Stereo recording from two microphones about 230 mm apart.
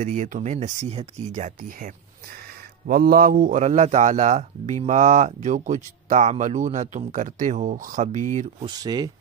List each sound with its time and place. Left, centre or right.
0.0 s a man's voice: right
2.9 s a man's voice: right
8.7 s speech: centre